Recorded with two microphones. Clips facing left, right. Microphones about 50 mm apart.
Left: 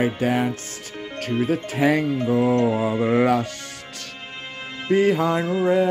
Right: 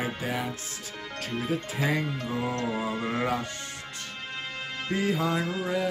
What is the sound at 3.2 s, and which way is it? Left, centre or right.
Music, left.